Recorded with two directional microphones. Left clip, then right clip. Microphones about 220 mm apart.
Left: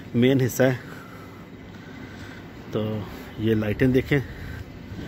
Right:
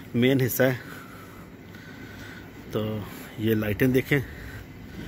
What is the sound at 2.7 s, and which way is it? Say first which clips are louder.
Speech: left 2 dB; centre (ahead or behind).